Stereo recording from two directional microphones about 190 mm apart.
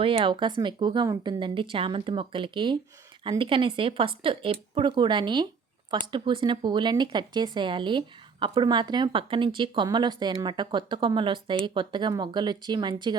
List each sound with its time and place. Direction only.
0.0 s speech: 30° right (ahead or behind)